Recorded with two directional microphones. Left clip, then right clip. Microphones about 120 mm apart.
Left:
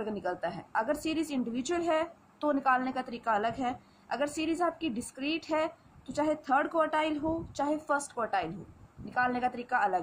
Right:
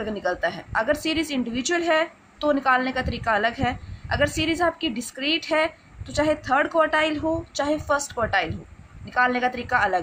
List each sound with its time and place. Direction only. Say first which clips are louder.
0.0 s a woman's voice: right 9 dB; 10° right (ahead or behind)